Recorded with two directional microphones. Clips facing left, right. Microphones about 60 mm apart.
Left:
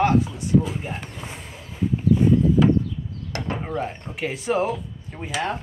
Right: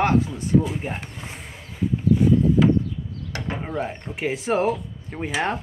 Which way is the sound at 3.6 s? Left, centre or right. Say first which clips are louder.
Even; centre.